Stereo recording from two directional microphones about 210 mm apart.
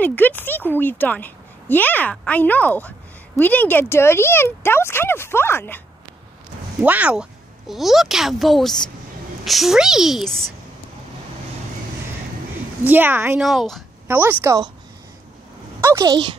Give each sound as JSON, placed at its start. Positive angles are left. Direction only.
{"t": 0.0, "sound": "speech", "side_deg": 10}
{"t": 6.8, "sound": "a child's voice", "side_deg": -5}
{"t": 12.8, "sound": "a woman's voice", "side_deg": -10}
{"t": 13.5, "sound": "a child's voice", "side_deg": 0}
{"t": 15.8, "sound": "speech", "side_deg": -15}